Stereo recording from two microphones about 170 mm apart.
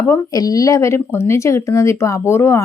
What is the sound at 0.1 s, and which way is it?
Speech, 20° left (ahead or behind).